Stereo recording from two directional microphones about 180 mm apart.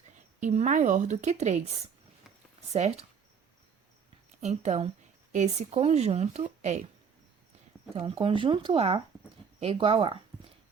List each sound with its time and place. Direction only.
0.4 s speech: 40° right (ahead or behind)
2.7 s speech: 35° right (ahead or behind)
4.4 s speech: 40° right (ahead or behind)
7.9 s speech: 30° right (ahead or behind)